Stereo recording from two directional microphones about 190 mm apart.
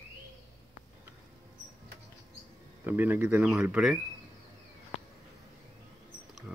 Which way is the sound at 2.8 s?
10° right (ahead or behind).